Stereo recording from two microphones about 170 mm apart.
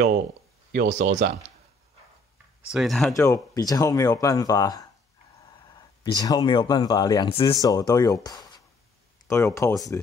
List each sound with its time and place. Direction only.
0.7 s speech: 45° right (ahead or behind)
2.7 s speech: centre (ahead or behind)
3.1 s speech: 20° left (ahead or behind)
6.2 s speech: 25° left (ahead or behind)
7.6 s speech: 20° left (ahead or behind)